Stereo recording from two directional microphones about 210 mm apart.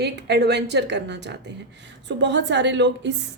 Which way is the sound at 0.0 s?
55° right (ahead or behind).